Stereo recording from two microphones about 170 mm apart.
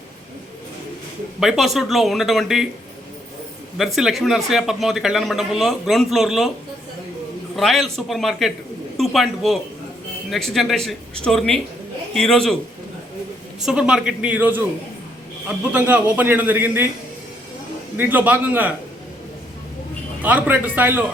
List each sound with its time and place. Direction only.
1.4 s a man's voice: centre (ahead or behind)
3.8 s a man's voice: centre (ahead or behind)
7.5 s a man's voice: centre (ahead or behind)
13.6 s a man's voice: 5° right (ahead or behind)
17.9 s a man's voice: 10° right (ahead or behind)
20.2 s a man's voice: 10° right (ahead or behind)